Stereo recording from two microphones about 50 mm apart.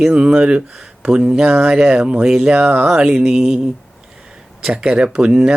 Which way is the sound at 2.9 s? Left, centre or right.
Centre.